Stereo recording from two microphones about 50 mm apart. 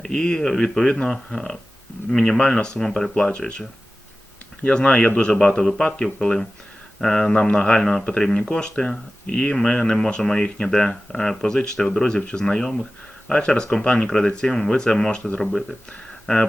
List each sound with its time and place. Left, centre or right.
0.0 s speech: centre